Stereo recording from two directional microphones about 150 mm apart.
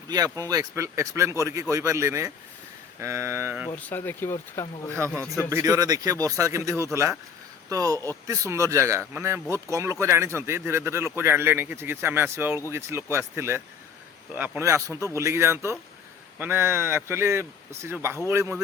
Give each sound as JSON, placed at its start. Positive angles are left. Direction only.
{"t": 0.1, "sound": "speech", "side_deg": -25}
{"t": 3.7, "sound": "speech", "side_deg": 10}
{"t": 4.9, "sound": "speech", "side_deg": -20}